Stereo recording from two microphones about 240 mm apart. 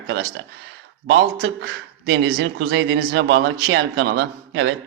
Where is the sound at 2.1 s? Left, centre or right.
Right.